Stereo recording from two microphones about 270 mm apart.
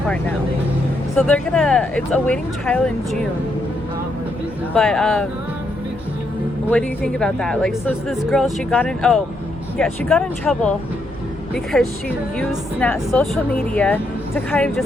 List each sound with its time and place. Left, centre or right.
1.1 s speech: centre
4.7 s speech: centre
6.7 s speech: centre